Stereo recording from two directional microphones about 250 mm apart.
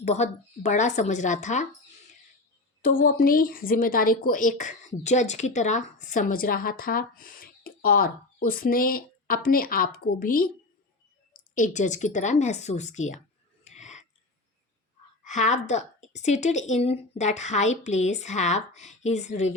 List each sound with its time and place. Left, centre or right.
0.0 s a woman's voice: left
2.8 s a woman's voice: left
13.7 s a sound: left
15.2 s a woman's voice: left